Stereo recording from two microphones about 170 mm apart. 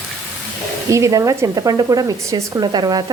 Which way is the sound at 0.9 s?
15° right (ahead or behind).